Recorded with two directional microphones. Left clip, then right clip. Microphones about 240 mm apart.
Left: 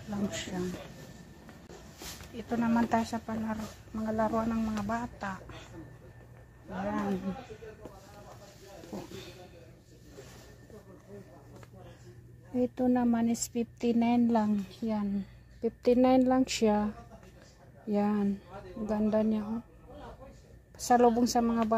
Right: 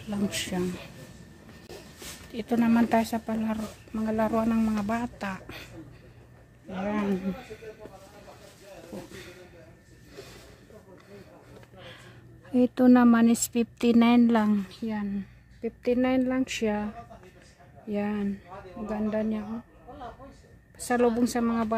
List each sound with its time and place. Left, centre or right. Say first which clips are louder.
0.1 s a man's voice: right 5 dB; right
2.3 s speech: right 5 dB; right
6.7 s a man's voice: right 4 dB; right
8.9 s a woman's voice: right 1 dB; centre
12.5 s speech: right 8 dB; right
14.9 s a woman's voice: left 3 dB; centre
20.8 s a woman's voice: left 1 dB; centre